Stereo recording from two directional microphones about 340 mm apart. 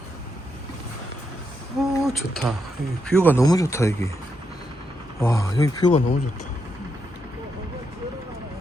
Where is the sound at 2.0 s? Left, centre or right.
Centre.